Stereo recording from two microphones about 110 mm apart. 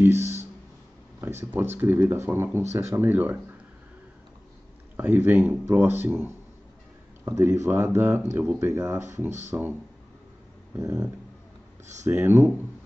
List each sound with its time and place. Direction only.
0.0 s a sound: 20° right (ahead or behind)
1.2 s speech: 20° right (ahead or behind)
4.9 s speech: 20° right (ahead or behind)
12.0 s speech: 25° right (ahead or behind)